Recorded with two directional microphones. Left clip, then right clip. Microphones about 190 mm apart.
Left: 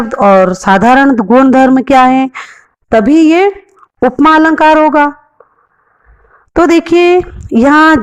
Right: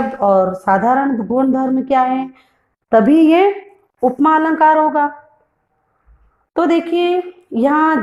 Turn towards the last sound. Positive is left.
turn(degrees=40)  # may be behind; listen again after turning